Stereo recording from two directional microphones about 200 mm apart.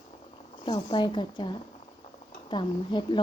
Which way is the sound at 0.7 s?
25° left (ahead or behind).